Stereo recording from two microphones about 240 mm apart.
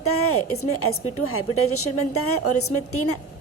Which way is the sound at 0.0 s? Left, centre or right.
Left.